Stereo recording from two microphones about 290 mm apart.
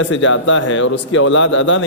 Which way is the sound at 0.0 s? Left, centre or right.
Left.